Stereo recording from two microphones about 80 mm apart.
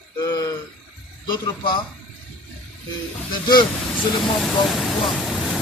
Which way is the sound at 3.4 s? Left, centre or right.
Left.